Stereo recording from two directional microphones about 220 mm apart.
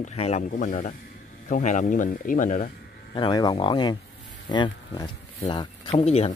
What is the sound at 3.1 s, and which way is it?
Speech, 20° left (ahead or behind).